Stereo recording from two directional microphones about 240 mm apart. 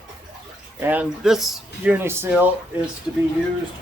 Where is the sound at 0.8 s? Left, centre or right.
Centre.